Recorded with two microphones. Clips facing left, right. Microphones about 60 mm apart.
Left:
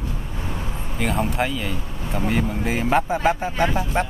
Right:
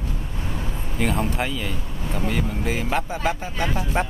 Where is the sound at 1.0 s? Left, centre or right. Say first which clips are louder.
Left 1 dB; centre; by 3.9 s left.